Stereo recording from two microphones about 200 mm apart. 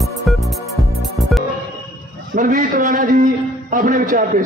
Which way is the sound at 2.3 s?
40° right (ahead or behind).